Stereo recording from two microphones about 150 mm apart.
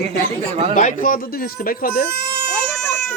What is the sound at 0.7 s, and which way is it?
Speech, 55° left (ahead or behind).